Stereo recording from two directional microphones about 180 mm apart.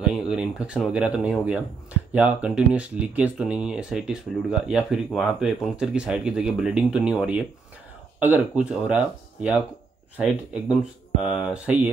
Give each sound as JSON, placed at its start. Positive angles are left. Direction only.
{"t": 0.0, "sound": "speech", "side_deg": -5}